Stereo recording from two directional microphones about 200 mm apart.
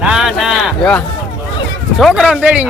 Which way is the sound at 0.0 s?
5° right (ahead or behind).